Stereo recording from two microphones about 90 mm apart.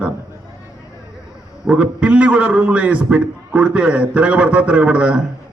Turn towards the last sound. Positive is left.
turn(degrees=-10)  # may be behind; listen again after turning